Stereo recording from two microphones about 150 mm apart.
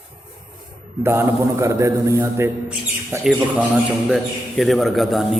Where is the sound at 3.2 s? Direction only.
5° right (ahead or behind).